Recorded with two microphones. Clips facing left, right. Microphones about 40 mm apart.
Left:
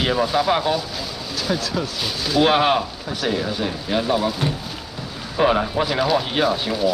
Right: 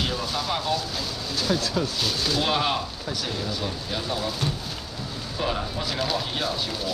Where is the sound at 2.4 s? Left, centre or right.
Left.